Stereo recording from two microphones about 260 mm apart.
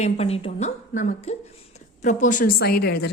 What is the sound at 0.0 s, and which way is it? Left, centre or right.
A woman's voice, left.